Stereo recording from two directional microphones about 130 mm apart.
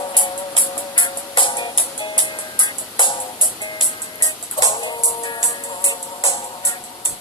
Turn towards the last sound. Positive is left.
turn(degrees=25)  # may be behind; listen again after turning